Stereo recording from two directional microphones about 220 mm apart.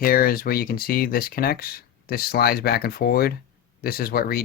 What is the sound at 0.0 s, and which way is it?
Speech, 40° left (ahead or behind).